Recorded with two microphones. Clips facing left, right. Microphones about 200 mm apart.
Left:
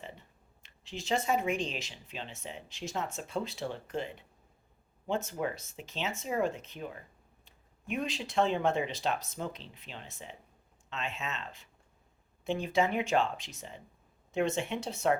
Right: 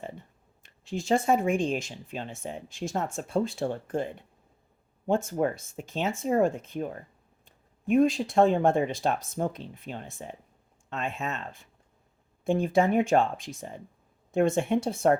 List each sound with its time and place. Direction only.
0.6 s speech: 50° right (ahead or behind)